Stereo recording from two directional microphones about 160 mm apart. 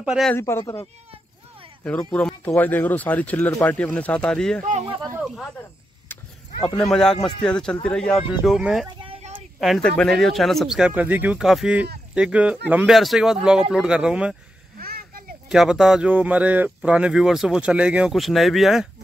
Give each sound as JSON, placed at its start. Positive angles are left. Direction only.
{"t": 0.0, "sound": "speech", "side_deg": -5}
{"t": 0.3, "sound": "speech", "side_deg": 15}
{"t": 2.1, "sound": "speech", "side_deg": 5}
{"t": 6.8, "sound": "speech", "side_deg": 5}
{"t": 9.0, "sound": "a sound", "side_deg": -35}
{"t": 9.6, "sound": "speech", "side_deg": 0}
{"t": 14.8, "sound": "a sound", "side_deg": -65}
{"t": 15.5, "sound": "speech", "side_deg": 0}